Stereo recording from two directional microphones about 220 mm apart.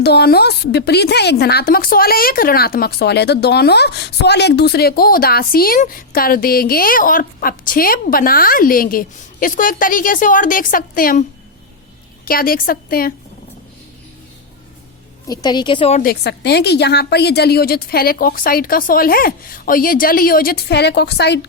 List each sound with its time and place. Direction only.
0.0 s a woman's voice: 45° left (ahead or behind)
15.3 s a woman's voice: 20° left (ahead or behind)
16.0 s a woman's voice: 45° left (ahead or behind)